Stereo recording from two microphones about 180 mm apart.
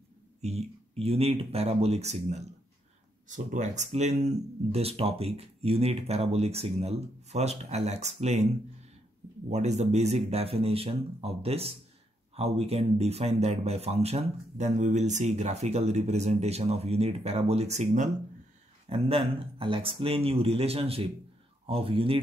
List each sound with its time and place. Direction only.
0.4 s speech: 35° right (ahead or behind)
9.5 s speech: 40° right (ahead or behind)